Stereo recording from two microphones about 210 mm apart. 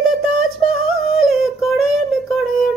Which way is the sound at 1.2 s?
Centre (ahead or behind).